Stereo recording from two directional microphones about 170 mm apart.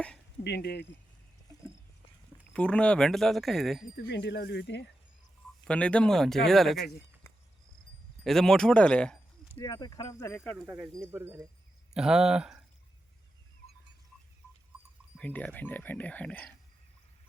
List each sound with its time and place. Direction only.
0.4 s speech: 75° left (ahead or behind)
2.5 s speech: 5° left (ahead or behind)
3.9 s speech: 90° left
5.6 s speech: 5° left (ahead or behind)
8.2 s speech: 5° left (ahead or behind)
9.6 s speech: 20° left (ahead or behind)
11.1 s speech: 15° right (ahead or behind)
11.9 s speech: 5° right (ahead or behind)
14.4 s a sound: 15° left (ahead or behind)
15.2 s speech: 10° left (ahead or behind)